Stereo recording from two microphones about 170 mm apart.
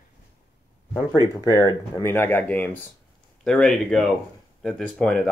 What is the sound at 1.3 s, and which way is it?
Speech, 20° left (ahead or behind).